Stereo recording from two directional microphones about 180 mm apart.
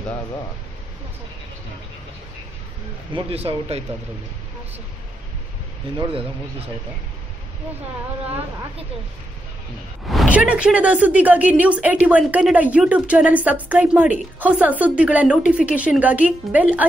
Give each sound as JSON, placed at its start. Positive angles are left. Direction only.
{"t": 3.1, "sound": "speech", "side_deg": -30}
{"t": 5.9, "sound": "speech", "side_deg": -30}
{"t": 10.0, "sound": "a woman's voice", "side_deg": -5}